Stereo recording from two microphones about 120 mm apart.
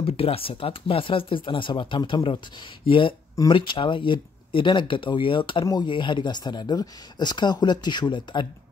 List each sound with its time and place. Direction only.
0.0 s speech: 50° left (ahead or behind)